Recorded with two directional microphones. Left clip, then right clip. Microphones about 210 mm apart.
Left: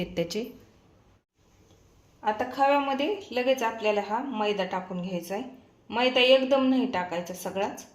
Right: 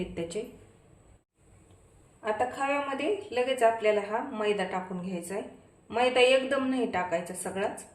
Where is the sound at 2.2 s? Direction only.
25° left (ahead or behind).